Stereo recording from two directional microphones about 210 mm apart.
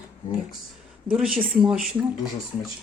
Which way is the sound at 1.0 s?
5° right (ahead or behind).